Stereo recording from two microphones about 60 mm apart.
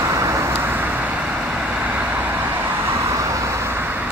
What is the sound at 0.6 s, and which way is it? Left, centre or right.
Vehicle, right.